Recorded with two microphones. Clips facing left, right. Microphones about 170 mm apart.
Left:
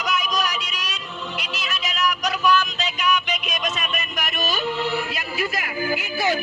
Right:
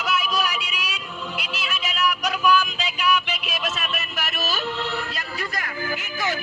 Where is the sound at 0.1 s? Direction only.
5° right (ahead or behind).